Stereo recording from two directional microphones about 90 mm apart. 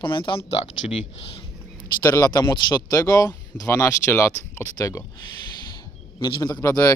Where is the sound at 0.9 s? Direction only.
90° left.